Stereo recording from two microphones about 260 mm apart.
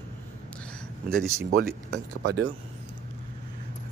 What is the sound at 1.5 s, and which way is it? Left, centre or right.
Speech, right.